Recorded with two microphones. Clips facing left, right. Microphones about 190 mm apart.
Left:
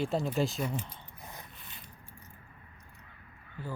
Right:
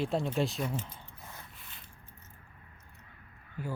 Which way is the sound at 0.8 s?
15° left (ahead or behind).